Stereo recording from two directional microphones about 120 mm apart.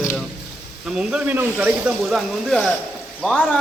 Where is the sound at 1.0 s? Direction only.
10° right (ahead or behind).